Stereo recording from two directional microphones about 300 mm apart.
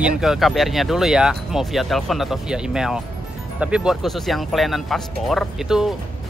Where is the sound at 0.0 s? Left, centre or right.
Centre.